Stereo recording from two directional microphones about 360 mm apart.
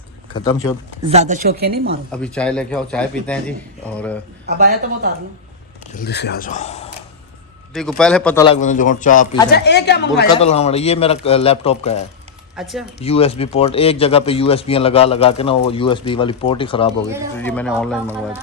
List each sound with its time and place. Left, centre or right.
1.1 s a woman's voice: centre
2.1 s a man's voice: centre
4.4 s a woman's voice: right
5.9 s speech: left
7.7 s a man's voice: centre
8.4 s speech: left
10.2 s speech: centre
12.5 s a man's voice: centre
13.0 s a man's voice: centre